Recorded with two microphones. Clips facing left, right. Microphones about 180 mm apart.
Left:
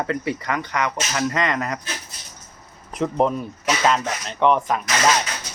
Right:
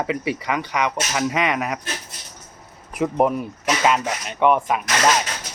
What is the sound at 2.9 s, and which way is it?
Speech, 10° right (ahead or behind).